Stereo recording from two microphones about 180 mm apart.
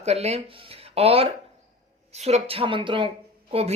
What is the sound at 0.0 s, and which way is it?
Speech, 35° right (ahead or behind).